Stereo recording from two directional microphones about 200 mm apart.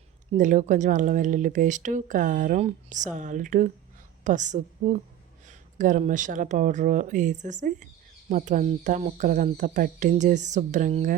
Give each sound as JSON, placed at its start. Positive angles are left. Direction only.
{"t": 0.3, "sound": "a woman's voice", "side_deg": -40}